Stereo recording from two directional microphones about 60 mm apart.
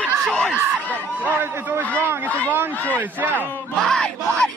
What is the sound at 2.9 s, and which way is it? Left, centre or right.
Speech, right.